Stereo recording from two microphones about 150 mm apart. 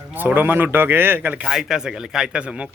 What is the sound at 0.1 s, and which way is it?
Speech, 10° right (ahead or behind).